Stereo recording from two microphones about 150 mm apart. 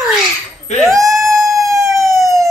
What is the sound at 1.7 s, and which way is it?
Emergency vehicle, 20° right (ahead or behind).